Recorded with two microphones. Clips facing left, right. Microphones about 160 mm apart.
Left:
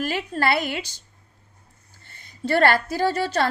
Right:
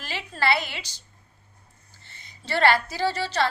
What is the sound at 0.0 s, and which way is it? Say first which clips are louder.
Speech: left 4 dB; 50° left (ahead or behind).